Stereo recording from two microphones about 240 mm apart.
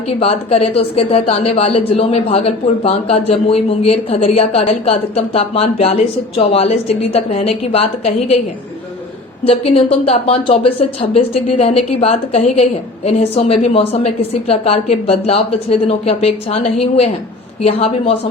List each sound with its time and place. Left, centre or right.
0.2 s speech: left
9.4 s speech: left